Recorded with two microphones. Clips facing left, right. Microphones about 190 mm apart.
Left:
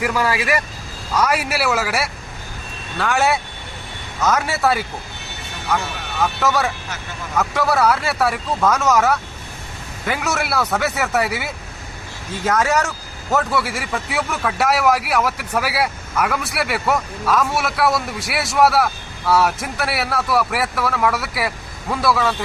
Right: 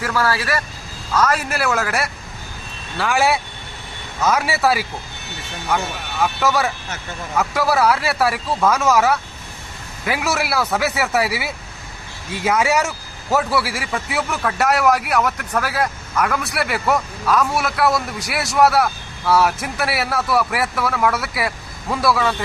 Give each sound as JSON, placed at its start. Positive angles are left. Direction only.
{"t": 0.0, "sound": "a man's voice", "side_deg": 15}